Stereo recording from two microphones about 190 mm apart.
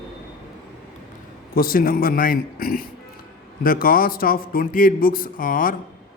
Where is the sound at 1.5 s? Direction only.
50° left (ahead or behind).